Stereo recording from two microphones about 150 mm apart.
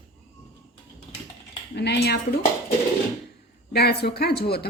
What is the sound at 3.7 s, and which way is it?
Speech, 90° left.